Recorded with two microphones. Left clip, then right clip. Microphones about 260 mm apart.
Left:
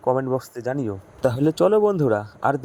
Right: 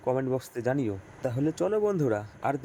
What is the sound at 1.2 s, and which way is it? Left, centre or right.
A man's voice, left.